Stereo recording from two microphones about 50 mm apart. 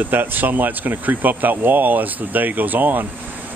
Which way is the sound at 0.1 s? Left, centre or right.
Right.